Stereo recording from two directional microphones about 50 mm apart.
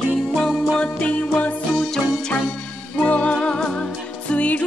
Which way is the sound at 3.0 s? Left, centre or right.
Left.